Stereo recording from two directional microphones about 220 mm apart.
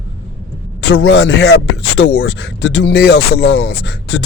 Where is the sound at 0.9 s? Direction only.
50° left (ahead or behind).